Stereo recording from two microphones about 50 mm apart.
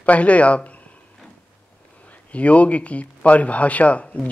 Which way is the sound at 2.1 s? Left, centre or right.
Left.